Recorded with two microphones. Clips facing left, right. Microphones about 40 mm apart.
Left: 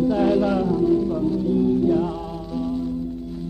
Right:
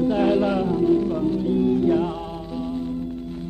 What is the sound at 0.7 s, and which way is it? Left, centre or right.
Music, right.